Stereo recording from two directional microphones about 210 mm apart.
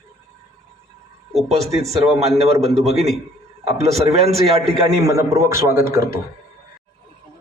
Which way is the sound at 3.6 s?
30° right (ahead or behind).